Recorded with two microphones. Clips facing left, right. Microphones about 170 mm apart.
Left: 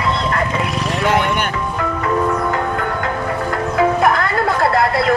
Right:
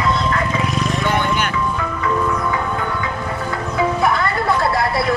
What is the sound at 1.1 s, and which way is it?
Music, 80° left.